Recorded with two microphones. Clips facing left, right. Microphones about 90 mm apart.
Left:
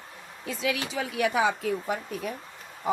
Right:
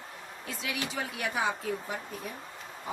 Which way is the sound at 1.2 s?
90° left.